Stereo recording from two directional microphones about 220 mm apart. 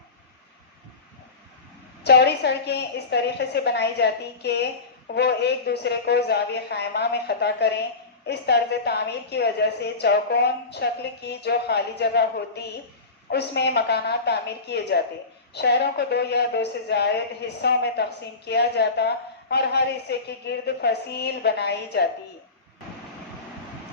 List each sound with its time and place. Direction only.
2.0 s a woman's voice: 50° left (ahead or behind)